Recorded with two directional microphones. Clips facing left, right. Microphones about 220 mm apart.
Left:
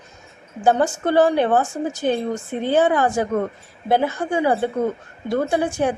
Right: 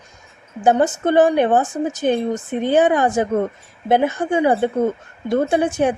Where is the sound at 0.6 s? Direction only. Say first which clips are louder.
Right 2 dB; 20° right (ahead or behind).